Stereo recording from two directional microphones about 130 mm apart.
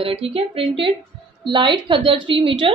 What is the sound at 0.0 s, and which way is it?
A woman's voice, 45° right (ahead or behind).